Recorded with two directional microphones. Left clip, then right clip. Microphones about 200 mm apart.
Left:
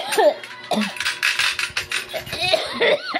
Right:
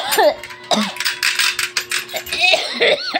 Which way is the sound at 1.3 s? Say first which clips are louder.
Right 3 dB; 50° right (ahead or behind).